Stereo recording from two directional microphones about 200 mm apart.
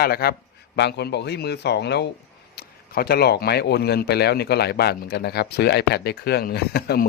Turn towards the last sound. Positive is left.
turn(degrees=55)  # may be behind; listen again after turning